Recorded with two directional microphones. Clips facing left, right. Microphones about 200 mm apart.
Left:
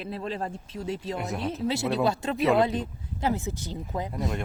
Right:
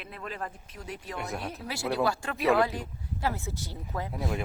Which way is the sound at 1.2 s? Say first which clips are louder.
Left 5 dB; centre (ahead or behind).